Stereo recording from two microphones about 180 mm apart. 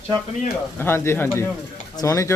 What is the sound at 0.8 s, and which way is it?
Speech, 10° left (ahead or behind).